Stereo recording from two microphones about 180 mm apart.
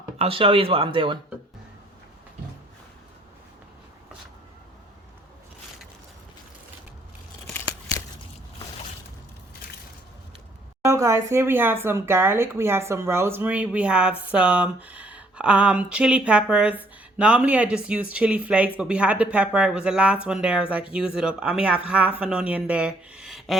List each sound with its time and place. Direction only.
0.2 s speech: 30° right (ahead or behind)
10.8 s speech: 15° right (ahead or behind)